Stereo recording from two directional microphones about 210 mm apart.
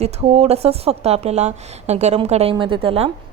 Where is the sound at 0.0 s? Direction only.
30° right (ahead or behind).